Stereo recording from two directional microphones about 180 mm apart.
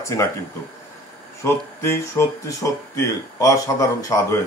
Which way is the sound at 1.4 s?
15° left (ahead or behind).